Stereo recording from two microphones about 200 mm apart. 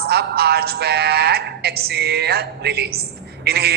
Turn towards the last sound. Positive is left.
turn(degrees=-55)  # may be behind; listen again after turning